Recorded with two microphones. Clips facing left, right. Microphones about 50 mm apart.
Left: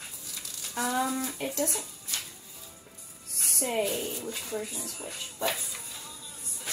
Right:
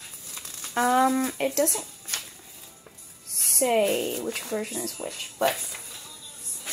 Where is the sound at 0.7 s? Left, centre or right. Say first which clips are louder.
Right 8 dB; right.